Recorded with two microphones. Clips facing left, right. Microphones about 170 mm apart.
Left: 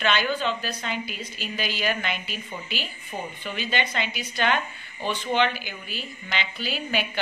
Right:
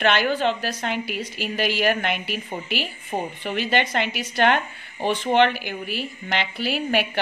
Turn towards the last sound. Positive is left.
turn(degrees=-70)  # may be behind; listen again after turning